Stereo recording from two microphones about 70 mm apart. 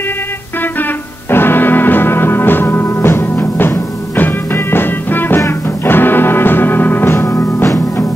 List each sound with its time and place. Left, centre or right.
1.3 s music: left